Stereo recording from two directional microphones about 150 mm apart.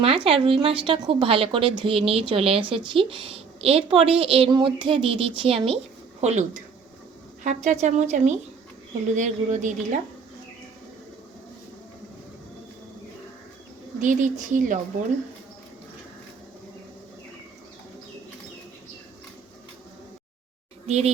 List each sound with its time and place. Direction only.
0.3 s a woman's voice: 40° right (ahead or behind); by 10.0 s 55° right (ahead or behind)
14.0 s a woman's voice: 60° right (ahead or behind)
20.8 s speech: 45° right (ahead or behind)